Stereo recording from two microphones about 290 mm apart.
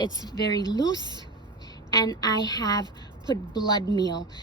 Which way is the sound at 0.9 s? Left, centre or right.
Centre.